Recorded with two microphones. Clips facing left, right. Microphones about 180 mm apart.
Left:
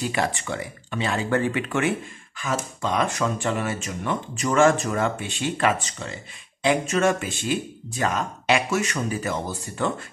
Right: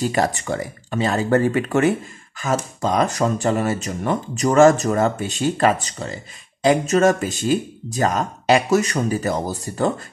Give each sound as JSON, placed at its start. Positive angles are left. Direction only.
{"t": 0.0, "sound": "speech", "side_deg": -40}